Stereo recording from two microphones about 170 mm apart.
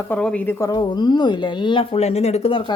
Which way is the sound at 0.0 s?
5° left (ahead or behind).